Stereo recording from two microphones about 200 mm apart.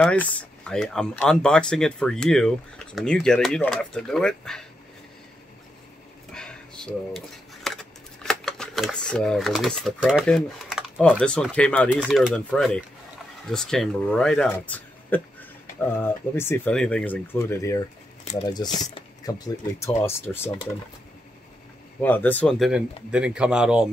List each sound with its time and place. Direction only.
0.0 s speech: 5° left (ahead or behind)
6.3 s speech: 5° left (ahead or behind)
11.9 s speech: 5° right (ahead or behind); by 20.5 s 10° left (ahead or behind)
22.0 s speech: 10° left (ahead or behind)